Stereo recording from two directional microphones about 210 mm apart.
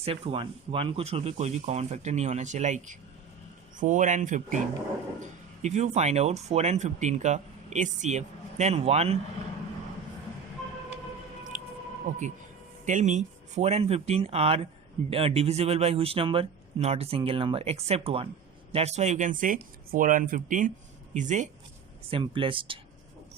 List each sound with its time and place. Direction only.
0.0 s speech: 25° right (ahead or behind)
11.5 s squish: 40° right (ahead or behind)
12.8 s speech: 35° right (ahead or behind)
22.1 s speech: 25° right (ahead or behind)